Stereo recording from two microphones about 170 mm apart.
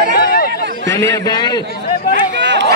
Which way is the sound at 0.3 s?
65° left (ahead or behind).